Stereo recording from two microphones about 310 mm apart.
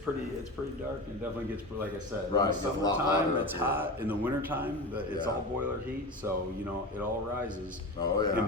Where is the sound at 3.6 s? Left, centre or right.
Centre.